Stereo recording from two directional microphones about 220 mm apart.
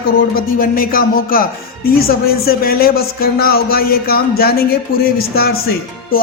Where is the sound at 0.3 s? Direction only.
40° left (ahead or behind).